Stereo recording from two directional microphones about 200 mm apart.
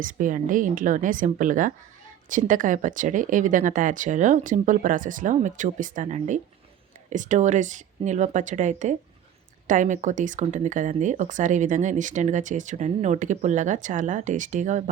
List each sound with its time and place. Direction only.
0.0 s speech: 40° right (ahead or behind)